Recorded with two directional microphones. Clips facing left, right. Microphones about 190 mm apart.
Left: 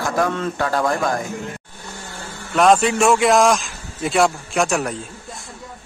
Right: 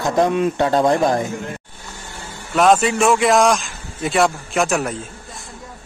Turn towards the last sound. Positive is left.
turn(degrees=0)  # may be behind; listen again after turning